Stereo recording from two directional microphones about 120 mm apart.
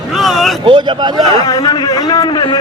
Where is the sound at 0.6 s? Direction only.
40° right (ahead or behind).